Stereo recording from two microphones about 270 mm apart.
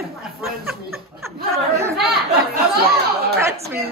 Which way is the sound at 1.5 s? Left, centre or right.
Centre.